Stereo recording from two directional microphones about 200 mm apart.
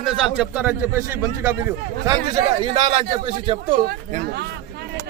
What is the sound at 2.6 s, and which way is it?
Speech, 25° right (ahead or behind).